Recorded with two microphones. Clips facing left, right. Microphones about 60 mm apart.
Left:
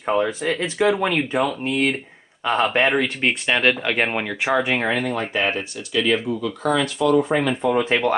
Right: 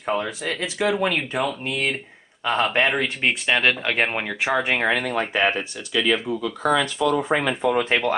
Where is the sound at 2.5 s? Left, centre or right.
Centre.